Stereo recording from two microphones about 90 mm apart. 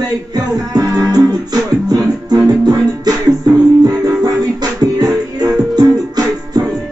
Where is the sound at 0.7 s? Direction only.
45° right (ahead or behind).